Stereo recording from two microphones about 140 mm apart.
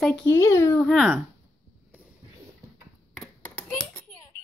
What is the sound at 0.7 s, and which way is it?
Speech, 5° left (ahead or behind).